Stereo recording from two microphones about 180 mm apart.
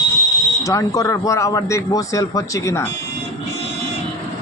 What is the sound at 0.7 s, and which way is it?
A man's voice, 20° left (ahead or behind).